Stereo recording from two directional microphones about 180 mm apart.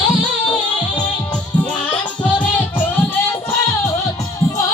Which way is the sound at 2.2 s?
10° left (ahead or behind).